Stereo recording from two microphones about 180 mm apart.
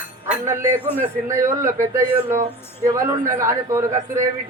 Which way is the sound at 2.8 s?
15° right (ahead or behind).